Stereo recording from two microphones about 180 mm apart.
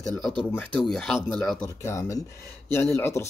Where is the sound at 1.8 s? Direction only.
15° left (ahead or behind).